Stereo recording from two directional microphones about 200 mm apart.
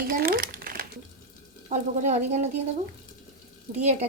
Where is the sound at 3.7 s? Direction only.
35° right (ahead or behind).